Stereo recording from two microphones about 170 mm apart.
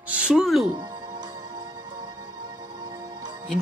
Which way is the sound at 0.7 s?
25° right (ahead or behind).